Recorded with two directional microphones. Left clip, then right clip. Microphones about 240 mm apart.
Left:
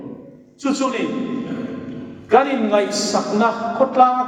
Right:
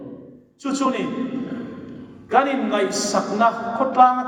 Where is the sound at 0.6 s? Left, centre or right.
Right.